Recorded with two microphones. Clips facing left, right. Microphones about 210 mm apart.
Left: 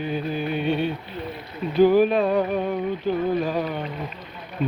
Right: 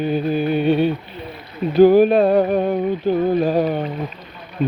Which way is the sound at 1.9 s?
35° right (ahead or behind).